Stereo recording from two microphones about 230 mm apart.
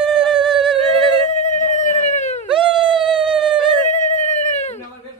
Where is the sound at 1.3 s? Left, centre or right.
Left.